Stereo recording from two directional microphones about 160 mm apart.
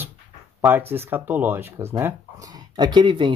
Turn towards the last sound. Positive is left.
turn(degrees=-30)  # may be behind; listen again after turning